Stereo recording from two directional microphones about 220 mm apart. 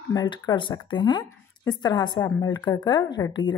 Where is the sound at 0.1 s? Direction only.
20° left (ahead or behind).